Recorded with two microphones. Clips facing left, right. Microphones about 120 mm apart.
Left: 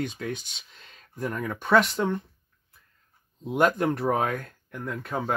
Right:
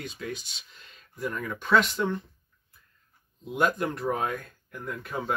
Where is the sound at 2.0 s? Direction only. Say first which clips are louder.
Left 2 dB; 40° left (ahead or behind).